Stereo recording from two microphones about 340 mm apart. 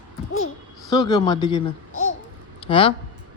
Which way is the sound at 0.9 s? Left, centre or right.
Centre.